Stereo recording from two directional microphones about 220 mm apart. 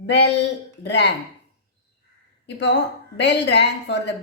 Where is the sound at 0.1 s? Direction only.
50° left (ahead or behind).